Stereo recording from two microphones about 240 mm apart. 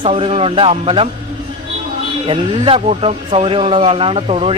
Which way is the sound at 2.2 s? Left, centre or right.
Right.